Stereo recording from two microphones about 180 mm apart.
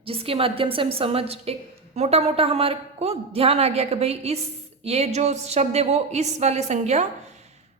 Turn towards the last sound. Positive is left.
turn(degrees=-40)  # may be behind; listen again after turning